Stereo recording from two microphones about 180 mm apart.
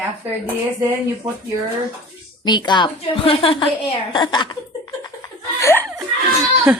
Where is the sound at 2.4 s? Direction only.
25° left (ahead or behind).